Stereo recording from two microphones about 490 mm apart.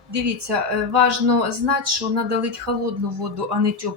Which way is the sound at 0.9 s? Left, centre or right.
Right.